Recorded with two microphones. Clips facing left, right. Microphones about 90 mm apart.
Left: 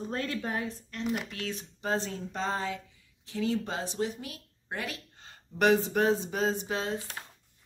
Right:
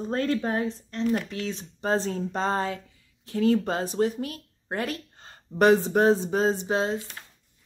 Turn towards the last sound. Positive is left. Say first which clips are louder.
# left 2 dB
turn(degrees=30)  # may be behind; listen again after turning